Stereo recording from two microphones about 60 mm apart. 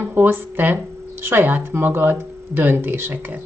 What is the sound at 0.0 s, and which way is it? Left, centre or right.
Speech, right.